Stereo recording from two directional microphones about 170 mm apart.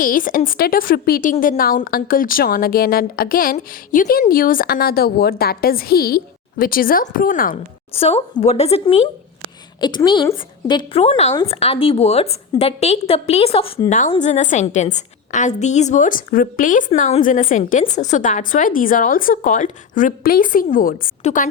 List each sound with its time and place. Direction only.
0.0 s a woman's voice: 55° left (ahead or behind)
7.9 s a woman's voice: 35° left (ahead or behind)
9.8 s a woman's voice: 25° left (ahead or behind); by 21.4 s 55° left (ahead or behind)